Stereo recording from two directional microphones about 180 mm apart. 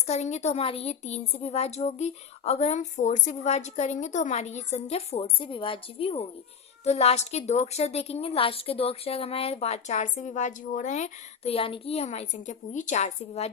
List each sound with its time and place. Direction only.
0.1 s a woman's voice: 40° left (ahead or behind)